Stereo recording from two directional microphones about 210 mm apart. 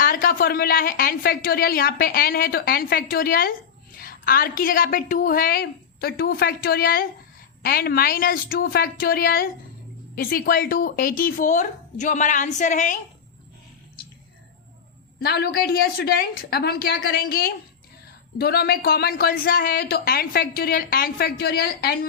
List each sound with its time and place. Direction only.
0.0 s speech: 45° left (ahead or behind)
15.2 s speech: 50° left (ahead or behind)